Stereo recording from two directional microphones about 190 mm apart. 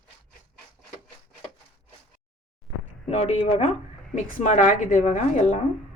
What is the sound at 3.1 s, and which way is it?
A woman's voice, 35° left (ahead or behind).